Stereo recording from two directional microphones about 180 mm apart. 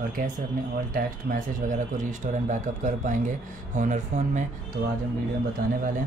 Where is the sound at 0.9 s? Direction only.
50° right (ahead or behind).